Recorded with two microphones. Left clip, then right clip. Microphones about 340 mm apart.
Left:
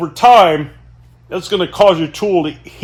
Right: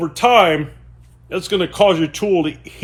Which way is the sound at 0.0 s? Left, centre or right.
Centre.